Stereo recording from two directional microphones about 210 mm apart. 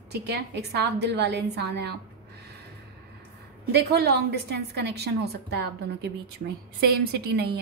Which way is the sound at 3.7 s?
50° right (ahead or behind).